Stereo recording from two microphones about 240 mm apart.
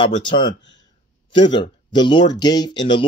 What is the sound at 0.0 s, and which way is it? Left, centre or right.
Speech, left.